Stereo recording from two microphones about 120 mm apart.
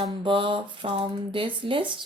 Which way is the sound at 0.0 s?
40° right (ahead or behind).